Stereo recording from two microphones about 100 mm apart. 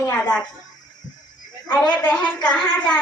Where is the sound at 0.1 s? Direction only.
20° left (ahead or behind).